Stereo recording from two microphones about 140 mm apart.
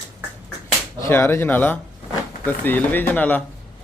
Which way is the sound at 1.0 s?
15° left (ahead or behind).